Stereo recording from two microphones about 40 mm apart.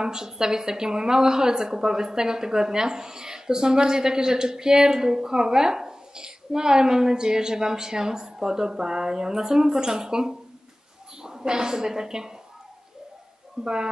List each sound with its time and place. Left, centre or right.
0.0 s a woman's voice: centre
13.6 s a woman's voice: centre